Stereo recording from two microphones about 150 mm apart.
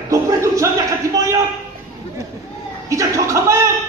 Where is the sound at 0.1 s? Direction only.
20° right (ahead or behind).